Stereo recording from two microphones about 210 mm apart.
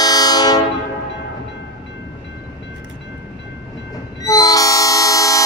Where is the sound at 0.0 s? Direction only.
20° left (ahead or behind).